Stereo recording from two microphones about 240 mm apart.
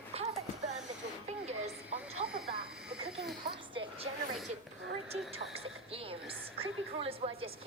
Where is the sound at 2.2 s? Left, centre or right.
Right.